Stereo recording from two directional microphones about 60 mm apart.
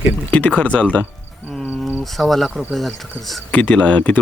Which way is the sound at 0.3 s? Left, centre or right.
Left.